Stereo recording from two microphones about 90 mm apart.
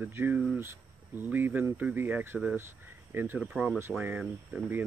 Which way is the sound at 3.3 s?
10° right (ahead or behind).